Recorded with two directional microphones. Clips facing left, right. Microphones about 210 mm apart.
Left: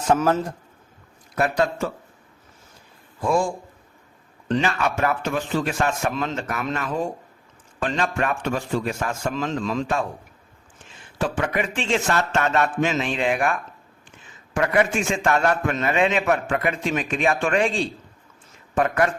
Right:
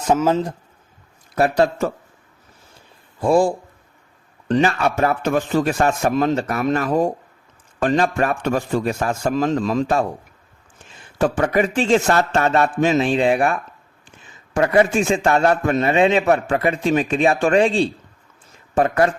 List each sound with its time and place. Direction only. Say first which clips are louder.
0.1 s a man's voice: right 2 dB; 15° right (ahead or behind)
1.4 s a man's voice: right 5 dB; 35° right (ahead or behind)
3.2 s a man's voice: right 6 dB; 35° right (ahead or behind)
11.2 s a man's voice: right 6 dB; 40° right (ahead or behind)